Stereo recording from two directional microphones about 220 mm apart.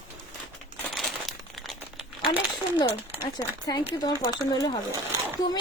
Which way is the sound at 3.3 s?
15° left (ahead or behind).